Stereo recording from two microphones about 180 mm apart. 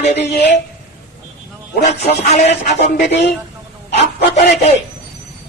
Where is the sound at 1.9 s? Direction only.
40° left (ahead or behind).